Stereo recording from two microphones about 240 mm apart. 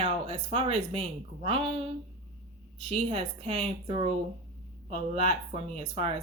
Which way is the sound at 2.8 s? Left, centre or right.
Right.